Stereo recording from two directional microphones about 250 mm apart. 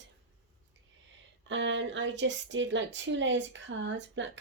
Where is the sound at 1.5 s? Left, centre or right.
Right.